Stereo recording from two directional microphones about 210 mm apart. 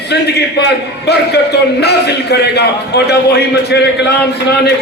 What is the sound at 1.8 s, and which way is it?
A man's voice, 50° left (ahead or behind).